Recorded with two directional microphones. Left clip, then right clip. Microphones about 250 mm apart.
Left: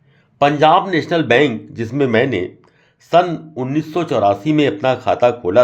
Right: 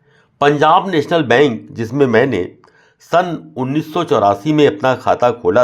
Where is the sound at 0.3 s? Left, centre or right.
Centre.